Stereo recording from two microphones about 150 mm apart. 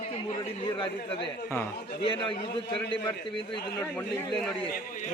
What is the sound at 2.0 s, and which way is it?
Speech, 30° left (ahead or behind).